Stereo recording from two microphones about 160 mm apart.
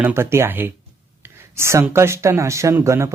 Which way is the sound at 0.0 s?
15° right (ahead or behind).